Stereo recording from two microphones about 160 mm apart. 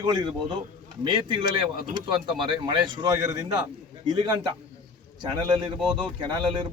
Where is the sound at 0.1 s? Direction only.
25° right (ahead or behind).